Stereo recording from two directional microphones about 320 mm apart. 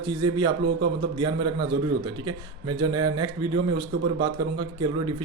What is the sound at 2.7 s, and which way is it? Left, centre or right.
Speech, right.